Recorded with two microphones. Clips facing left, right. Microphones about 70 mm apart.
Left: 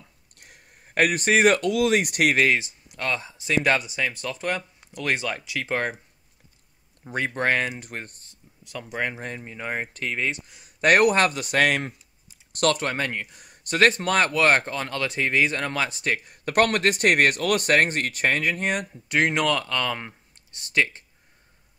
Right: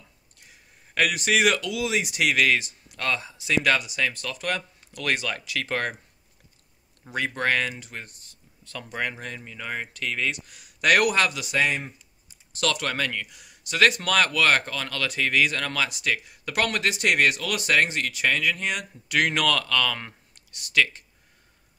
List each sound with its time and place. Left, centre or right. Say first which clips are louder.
0.4 s speech: left 3 dB; left
2.3 s speech: left 1 dB; left
7.2 s speech: left 1 dB; left
7.8 s speech: left 3 dB; left
8.3 s a sound: left 2 dB; centre
9.2 s speech: left 3 dB; left
10.8 s speech: left 3 dB; left
11.5 s speech: left 3 dB; left
12.5 s speech: left 4 dB; left
12.8 s speech: left 1 dB; left
19.1 s speech: left 1 dB; left